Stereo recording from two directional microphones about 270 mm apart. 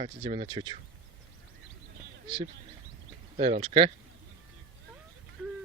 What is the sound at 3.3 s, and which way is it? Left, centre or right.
Speech, right.